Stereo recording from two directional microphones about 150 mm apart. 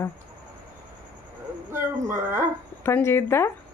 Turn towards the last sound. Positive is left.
turn(degrees=15)  # may be behind; listen again after turning